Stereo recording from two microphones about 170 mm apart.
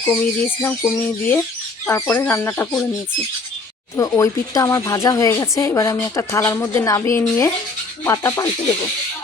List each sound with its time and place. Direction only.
0.0 s speech: 10° left (ahead or behind)
3.9 s speech: 20° left (ahead or behind)